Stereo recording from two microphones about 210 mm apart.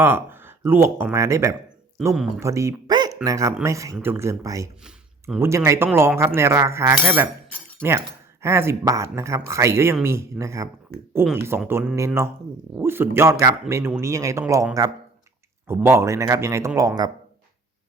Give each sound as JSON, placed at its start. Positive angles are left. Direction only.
{"t": 0.0, "sound": "speech", "side_deg": -10}
{"t": 2.0, "sound": "speech", "side_deg": -5}
{"t": 2.4, "sound": "speech", "side_deg": -15}